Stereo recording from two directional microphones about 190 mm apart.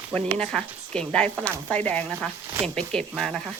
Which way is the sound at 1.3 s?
15° right (ahead or behind).